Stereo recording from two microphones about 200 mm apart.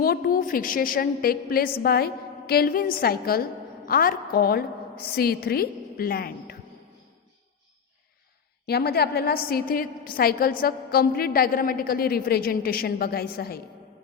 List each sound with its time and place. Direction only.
0.0 s a woman's voice: 50° left (ahead or behind)
8.6 s a woman's voice: 50° left (ahead or behind)